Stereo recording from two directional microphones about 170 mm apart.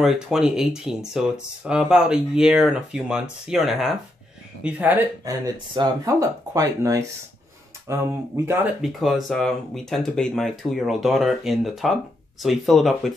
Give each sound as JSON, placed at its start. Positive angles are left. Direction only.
{"t": 0.0, "sound": "speech", "side_deg": -5}
{"t": 5.8, "sound": "speech", "side_deg": -20}
{"t": 9.0, "sound": "speech", "side_deg": 0}